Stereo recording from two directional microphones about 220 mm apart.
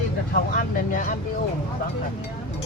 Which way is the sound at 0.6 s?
40° left (ahead or behind).